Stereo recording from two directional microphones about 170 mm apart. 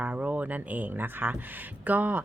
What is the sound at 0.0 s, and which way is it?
Speech, 10° right (ahead or behind).